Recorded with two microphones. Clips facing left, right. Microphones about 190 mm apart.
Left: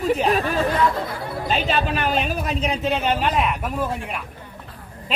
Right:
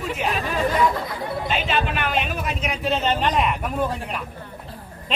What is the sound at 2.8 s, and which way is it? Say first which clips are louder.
Speech: right 2 dB; 10° left (ahead or behind).